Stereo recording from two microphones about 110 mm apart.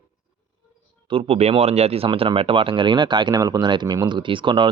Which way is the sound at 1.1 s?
65° right (ahead or behind).